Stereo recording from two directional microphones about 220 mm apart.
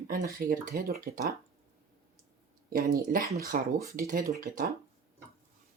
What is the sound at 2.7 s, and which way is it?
Speech, 40° right (ahead or behind).